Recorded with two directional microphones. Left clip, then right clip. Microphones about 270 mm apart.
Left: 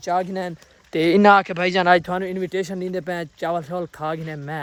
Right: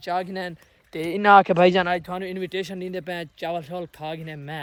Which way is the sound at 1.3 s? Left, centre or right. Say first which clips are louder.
Right 3 dB; centre.